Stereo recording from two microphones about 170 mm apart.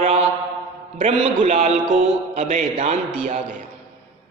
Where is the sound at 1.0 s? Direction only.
40° right (ahead or behind).